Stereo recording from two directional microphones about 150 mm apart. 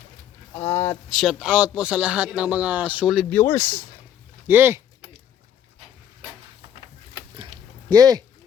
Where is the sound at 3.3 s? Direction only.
15° left (ahead or behind).